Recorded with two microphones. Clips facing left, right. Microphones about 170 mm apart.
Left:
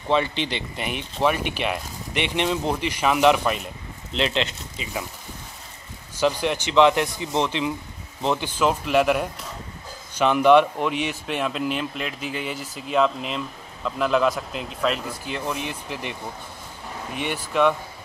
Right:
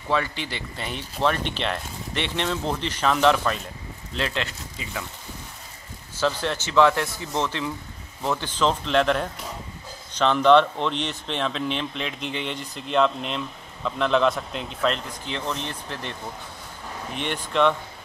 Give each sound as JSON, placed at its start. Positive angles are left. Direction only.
{"t": 0.1, "sound": "speech", "side_deg": 20}
{"t": 6.1, "sound": "speech", "side_deg": 15}